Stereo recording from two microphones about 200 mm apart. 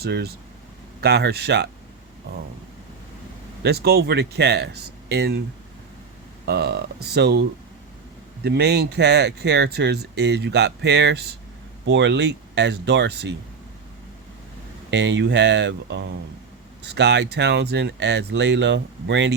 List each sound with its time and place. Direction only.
0.0 s speech: 50° right (ahead or behind)
3.6 s speech: 55° right (ahead or behind)
6.4 s speech: 55° right (ahead or behind)
8.4 s speech: 55° right (ahead or behind)
14.8 s speech: 60° right (ahead or behind)